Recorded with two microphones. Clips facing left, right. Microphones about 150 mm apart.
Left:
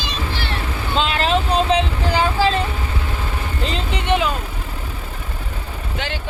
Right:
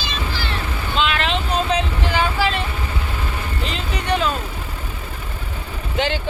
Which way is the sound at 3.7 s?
30° left (ahead or behind).